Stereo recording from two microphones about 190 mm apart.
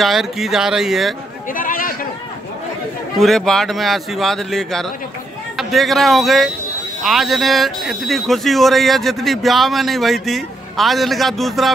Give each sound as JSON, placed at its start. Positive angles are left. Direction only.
{"t": 0.0, "sound": "speech", "side_deg": 0}
{"t": 1.5, "sound": "a sound", "side_deg": 45}
{"t": 3.2, "sound": "speech", "side_deg": 0}